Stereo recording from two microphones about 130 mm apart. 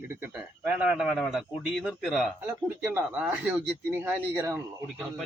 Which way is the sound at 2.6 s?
15° right (ahead or behind).